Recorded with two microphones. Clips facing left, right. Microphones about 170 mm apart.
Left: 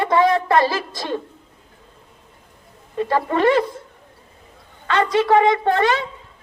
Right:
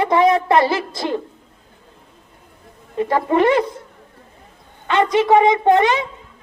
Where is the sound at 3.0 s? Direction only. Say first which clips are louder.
Right 2 dB; 20° right (ahead or behind).